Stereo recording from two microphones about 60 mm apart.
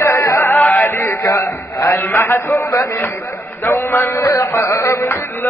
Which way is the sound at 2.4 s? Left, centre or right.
Left.